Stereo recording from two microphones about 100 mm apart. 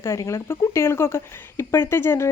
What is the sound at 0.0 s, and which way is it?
Speech, 30° left (ahead or behind).